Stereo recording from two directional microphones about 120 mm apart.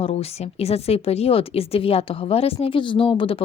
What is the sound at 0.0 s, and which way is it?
A woman's voice, 55° left (ahead or behind).